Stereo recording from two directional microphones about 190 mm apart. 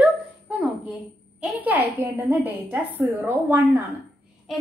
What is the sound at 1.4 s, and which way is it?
A child's voice, 10° right (ahead or behind).